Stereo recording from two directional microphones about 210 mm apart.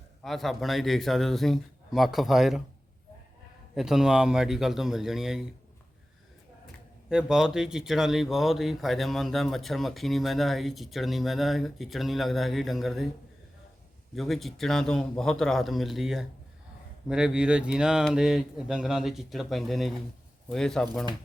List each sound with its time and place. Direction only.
0.2 s speech: centre (ahead or behind)
3.8 s speech: centre (ahead or behind)
7.1 s speech: 5° right (ahead or behind)
14.2 s speech: centre (ahead or behind)